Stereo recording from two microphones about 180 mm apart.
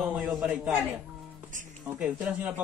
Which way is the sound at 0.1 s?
5° right (ahead or behind).